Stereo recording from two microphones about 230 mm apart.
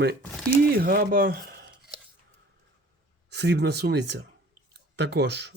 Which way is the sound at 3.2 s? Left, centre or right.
Right.